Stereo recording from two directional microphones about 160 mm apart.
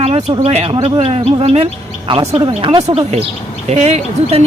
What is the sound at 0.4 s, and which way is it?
A man's voice, 40° right (ahead or behind).